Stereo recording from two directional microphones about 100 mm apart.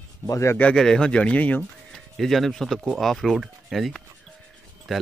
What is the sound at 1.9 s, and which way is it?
Speech, centre (ahead or behind).